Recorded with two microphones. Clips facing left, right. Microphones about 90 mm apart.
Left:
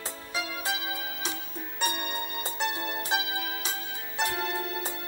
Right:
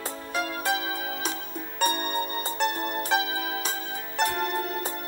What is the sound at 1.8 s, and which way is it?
Music, 45° right (ahead or behind).